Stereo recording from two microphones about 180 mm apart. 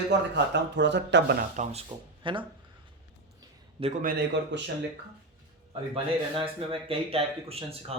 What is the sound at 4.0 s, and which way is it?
Speech, 50° right (ahead or behind).